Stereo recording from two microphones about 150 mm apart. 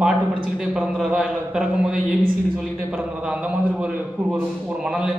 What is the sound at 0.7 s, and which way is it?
Speech, 5° right (ahead or behind).